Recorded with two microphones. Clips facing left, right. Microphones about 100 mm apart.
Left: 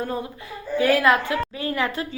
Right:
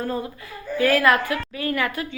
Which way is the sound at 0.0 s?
15° left (ahead or behind).